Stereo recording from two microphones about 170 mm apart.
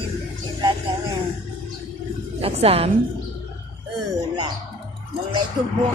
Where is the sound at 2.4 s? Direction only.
35° right (ahead or behind).